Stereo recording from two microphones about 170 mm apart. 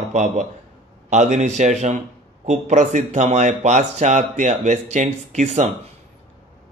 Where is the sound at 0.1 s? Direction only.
40° right (ahead or behind).